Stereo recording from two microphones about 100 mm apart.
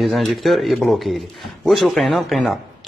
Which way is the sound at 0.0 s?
Centre (ahead or behind).